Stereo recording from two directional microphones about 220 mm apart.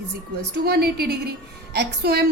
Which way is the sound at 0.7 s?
45° right (ahead or behind).